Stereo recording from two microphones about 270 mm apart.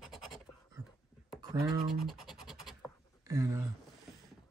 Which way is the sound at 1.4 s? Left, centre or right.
Centre.